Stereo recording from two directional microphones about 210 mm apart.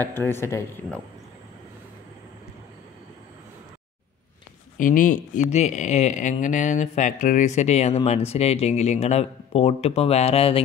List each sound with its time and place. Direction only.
0.0 s speech: 10° left (ahead or behind)
4.7 s speech: 40° left (ahead or behind)